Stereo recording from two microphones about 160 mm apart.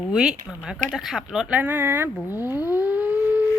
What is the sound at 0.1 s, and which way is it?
Speech, 5° right (ahead or behind).